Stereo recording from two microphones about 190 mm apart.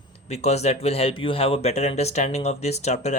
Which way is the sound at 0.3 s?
35° left (ahead or behind).